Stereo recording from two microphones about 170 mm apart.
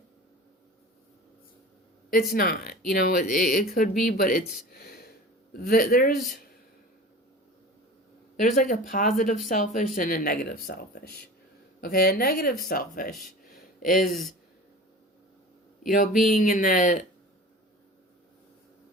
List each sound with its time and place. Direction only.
2.0 s speech: 60° left (ahead or behind)
8.4 s speech: 50° left (ahead or behind)
11.8 s speech: 60° left (ahead or behind)
13.5 s a sound: 55° left (ahead or behind)
14.1 s speech: centre (ahead or behind)
16.0 s speech: 55° left (ahead or behind)